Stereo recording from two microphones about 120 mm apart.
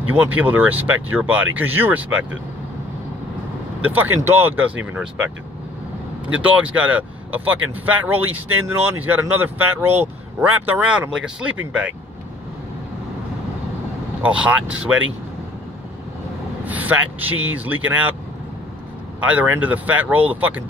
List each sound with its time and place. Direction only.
0.1 s speech: 15° right (ahead or behind)
3.8 s speech: 15° right (ahead or behind)
14.2 s speech: 10° right (ahead or behind)
16.6 s speech: 15° right (ahead or behind)
19.2 s speech: 15° right (ahead or behind)